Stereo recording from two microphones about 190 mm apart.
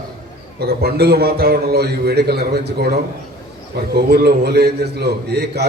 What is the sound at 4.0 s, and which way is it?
A man's voice, 55° right (ahead or behind).